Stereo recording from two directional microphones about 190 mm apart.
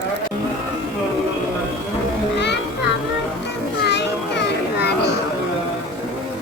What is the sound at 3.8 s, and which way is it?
Children playing, 65° left (ahead or behind).